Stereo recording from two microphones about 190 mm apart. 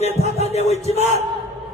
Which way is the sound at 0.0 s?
35° left (ahead or behind).